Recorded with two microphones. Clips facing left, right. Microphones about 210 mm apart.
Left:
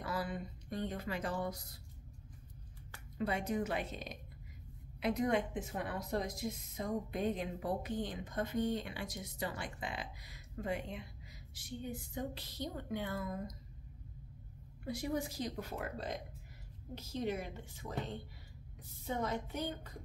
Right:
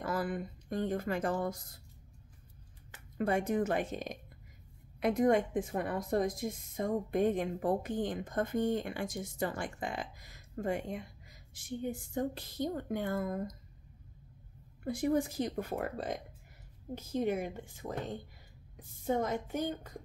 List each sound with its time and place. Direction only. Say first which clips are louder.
0.0 s speech: right 5 dB; 50° right (ahead or behind)
3.2 s a woman's voice: right 5 dB; 50° right (ahead or behind)
14.9 s a woman's voice: right 7 dB; 50° right (ahead or behind)